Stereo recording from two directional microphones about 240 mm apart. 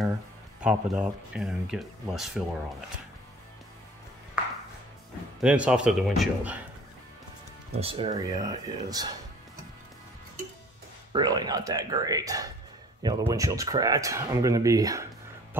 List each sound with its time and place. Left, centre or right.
0.6 s speech: centre
5.4 s speech: centre
7.7 s speech: right
11.1 s speech: centre